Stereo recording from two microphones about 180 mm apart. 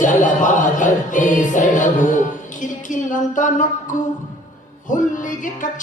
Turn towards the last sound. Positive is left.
turn(degrees=45)  # may be behind; listen again after turning